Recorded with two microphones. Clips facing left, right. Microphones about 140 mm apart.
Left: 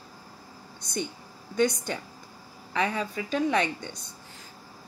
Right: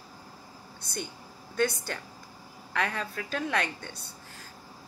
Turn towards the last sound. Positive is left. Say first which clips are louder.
# left 4 dB
turn(degrees=15)  # may be behind; listen again after turning